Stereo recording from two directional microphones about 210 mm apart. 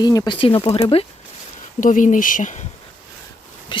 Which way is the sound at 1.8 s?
40° left (ahead or behind).